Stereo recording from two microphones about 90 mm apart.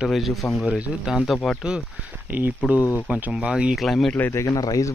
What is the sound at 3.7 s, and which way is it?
Speech, centre (ahead or behind).